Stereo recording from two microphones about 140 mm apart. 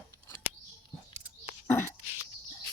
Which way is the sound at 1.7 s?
15° left (ahead or behind).